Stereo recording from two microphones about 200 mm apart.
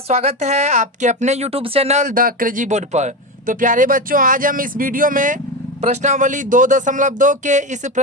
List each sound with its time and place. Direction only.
0.1 s speech: 30° right (ahead or behind)